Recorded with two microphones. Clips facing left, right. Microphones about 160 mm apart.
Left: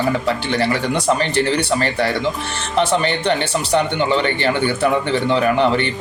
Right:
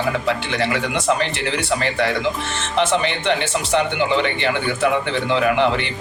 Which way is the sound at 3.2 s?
40° left (ahead or behind).